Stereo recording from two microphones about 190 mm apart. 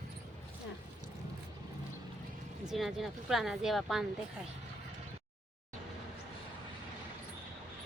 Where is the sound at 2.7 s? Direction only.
Centre (ahead or behind).